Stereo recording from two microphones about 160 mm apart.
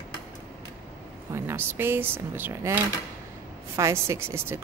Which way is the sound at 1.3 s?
15° right (ahead or behind).